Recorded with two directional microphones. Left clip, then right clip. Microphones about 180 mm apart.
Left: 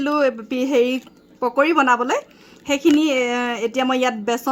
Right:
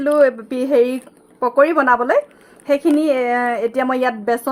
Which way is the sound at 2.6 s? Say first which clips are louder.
Right 1 dB; 35° left (ahead or behind).